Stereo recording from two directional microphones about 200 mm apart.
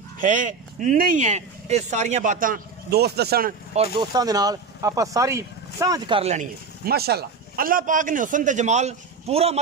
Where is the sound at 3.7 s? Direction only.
25° right (ahead or behind).